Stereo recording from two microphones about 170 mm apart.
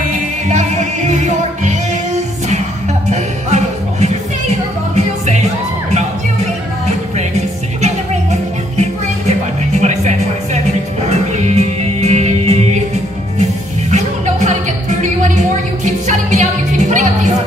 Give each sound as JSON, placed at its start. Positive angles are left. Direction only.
{"t": 0.5, "sound": "music", "side_deg": -45}
{"t": 3.1, "sound": "music", "side_deg": -40}
{"t": 7.8, "sound": "music", "side_deg": -45}